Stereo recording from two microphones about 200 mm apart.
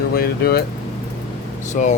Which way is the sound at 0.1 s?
50° left (ahead or behind).